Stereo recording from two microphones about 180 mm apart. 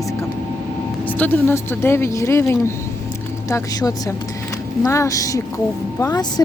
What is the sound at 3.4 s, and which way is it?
Speech, 20° left (ahead or behind).